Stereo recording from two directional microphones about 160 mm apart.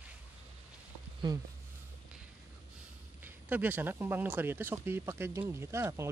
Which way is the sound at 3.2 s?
10° right (ahead or behind).